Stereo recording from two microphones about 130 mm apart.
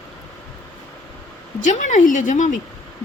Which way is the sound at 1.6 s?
70° left (ahead or behind).